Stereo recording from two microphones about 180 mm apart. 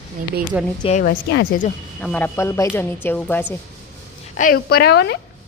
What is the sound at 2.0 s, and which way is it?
Speech, 5° left (ahead or behind).